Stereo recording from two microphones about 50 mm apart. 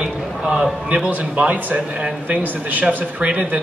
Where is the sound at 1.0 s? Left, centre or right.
Right.